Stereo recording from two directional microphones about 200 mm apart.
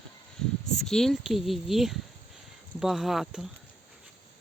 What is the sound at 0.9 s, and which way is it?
Speech, centre (ahead or behind).